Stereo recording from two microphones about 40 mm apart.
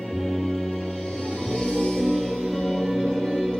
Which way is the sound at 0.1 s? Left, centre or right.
Centre.